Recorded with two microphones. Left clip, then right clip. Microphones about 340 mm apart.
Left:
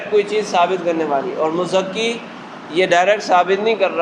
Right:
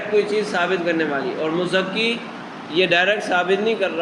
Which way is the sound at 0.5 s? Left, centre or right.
Centre.